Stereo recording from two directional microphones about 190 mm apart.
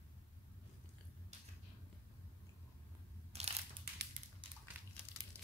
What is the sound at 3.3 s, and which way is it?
Crushing, 35° right (ahead or behind).